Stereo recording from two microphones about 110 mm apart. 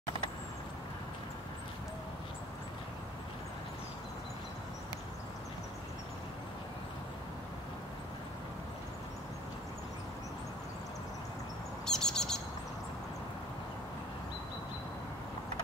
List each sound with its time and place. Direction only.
11.8 s bird: 5° left (ahead or behind)